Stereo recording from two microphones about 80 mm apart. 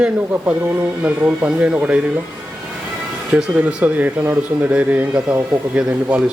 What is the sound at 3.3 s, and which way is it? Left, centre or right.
Speech, centre.